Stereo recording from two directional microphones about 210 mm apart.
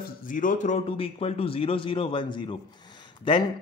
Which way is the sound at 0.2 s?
40° left (ahead or behind).